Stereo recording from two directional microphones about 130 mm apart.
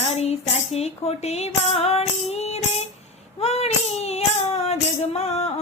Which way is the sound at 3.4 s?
55° left (ahead or behind).